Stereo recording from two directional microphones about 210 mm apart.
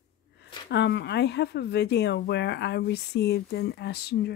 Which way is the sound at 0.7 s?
55° left (ahead or behind).